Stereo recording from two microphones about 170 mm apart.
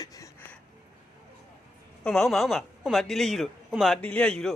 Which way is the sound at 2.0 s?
Centre (ahead or behind).